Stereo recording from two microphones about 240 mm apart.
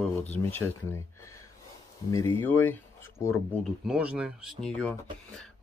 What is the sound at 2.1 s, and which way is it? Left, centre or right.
Speech, centre.